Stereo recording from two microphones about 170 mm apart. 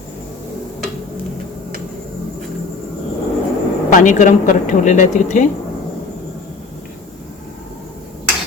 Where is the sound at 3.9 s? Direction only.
50° left (ahead or behind).